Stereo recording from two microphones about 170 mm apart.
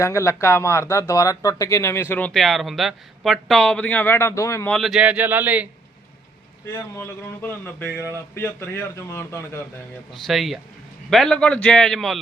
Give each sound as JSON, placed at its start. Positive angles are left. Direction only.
{"t": 0.0, "sound": "speech", "side_deg": 15}
{"t": 4.7, "sound": "speech", "side_deg": 0}
{"t": 6.7, "sound": "speech", "side_deg": 15}
{"t": 7.9, "sound": "speech", "side_deg": -15}
{"t": 8.4, "sound": "speech", "side_deg": 15}
{"t": 10.2, "sound": "a man's voice", "side_deg": 0}